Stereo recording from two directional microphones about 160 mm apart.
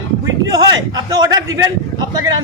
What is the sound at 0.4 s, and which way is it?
A man's voice, 25° right (ahead or behind).